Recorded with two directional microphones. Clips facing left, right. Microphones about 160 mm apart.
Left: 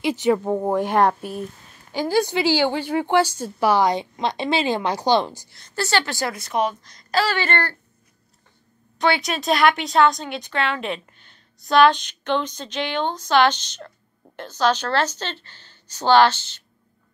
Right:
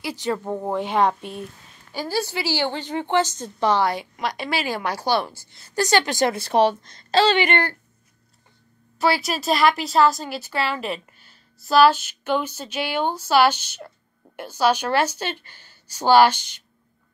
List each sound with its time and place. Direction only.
0.0 s a woman's voice: 20° left (ahead or behind)
3.9 s a woman's voice: 25° left (ahead or behind)
5.8 s a woman's voice: 15° right (ahead or behind)
8.9 s a woman's voice: 5° right (ahead or behind)